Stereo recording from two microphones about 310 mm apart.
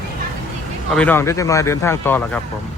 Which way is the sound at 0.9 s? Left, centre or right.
Centre.